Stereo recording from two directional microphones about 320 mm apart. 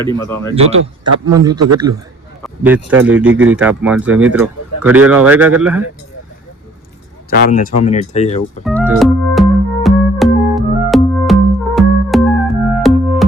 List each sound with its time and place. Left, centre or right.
0.2 s speech: centre
0.5 s speech: centre
1.5 s a man's voice: right
2.4 s speech: centre
7.3 s speech: left
8.6 s music: centre